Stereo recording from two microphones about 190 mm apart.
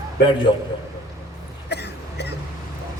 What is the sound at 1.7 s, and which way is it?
Cough, 60° left (ahead or behind).